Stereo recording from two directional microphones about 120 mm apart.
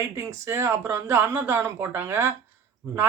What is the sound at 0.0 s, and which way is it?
Speech, 25° right (ahead or behind).